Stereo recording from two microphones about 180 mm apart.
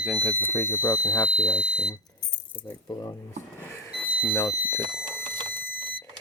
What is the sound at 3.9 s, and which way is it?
Smoke detector, 10° left (ahead or behind).